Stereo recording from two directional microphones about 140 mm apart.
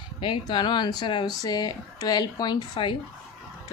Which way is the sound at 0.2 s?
35° left (ahead or behind).